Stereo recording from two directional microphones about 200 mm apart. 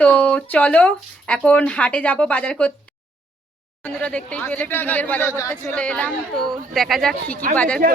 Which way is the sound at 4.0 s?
5° left (ahead or behind).